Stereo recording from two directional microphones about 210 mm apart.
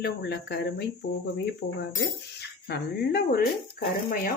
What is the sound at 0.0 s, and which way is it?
Speech, 45° left (ahead or behind).